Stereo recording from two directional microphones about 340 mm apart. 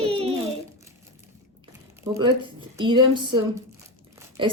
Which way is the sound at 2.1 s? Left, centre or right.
Centre.